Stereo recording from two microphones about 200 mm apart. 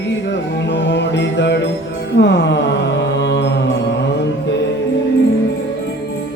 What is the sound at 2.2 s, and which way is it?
Mantra, 60° left (ahead or behind).